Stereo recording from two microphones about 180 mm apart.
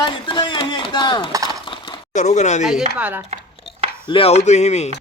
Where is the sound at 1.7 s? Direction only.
25° left (ahead or behind).